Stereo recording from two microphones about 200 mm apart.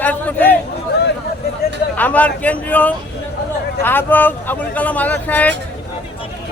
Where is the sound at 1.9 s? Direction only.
10° left (ahead or behind).